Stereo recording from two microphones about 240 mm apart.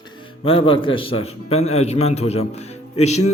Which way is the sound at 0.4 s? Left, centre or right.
Left.